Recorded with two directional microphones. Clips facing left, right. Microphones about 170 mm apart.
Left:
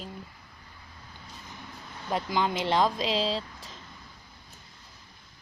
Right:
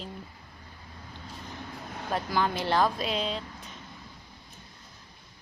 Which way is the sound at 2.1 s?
15° left (ahead or behind).